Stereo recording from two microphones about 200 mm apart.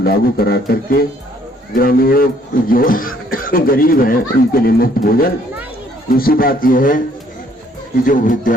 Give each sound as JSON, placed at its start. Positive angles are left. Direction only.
{"t": 0.0, "sound": "speech", "side_deg": 50}
{"t": 8.0, "sound": "speech", "side_deg": 40}